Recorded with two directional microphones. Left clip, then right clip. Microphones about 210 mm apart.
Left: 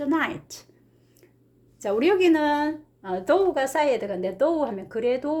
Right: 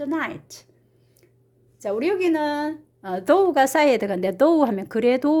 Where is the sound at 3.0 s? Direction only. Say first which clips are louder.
Right 3 dB; 35° right (ahead or behind).